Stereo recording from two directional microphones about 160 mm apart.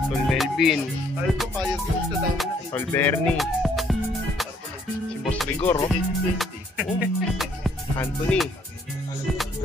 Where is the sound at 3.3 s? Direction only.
Centre (ahead or behind).